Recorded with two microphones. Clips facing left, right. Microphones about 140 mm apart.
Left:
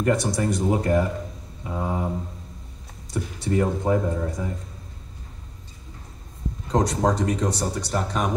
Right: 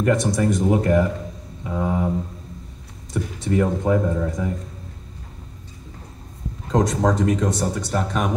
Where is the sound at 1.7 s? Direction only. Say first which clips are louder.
Right 4 dB; 15° left (ahead or behind).